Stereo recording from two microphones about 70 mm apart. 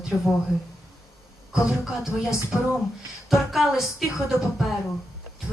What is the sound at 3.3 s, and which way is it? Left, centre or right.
Speech, centre.